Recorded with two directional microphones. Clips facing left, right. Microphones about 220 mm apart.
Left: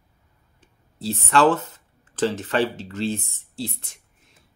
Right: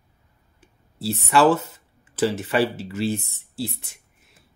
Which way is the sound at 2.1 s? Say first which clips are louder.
Right 1 dB; 10° right (ahead or behind).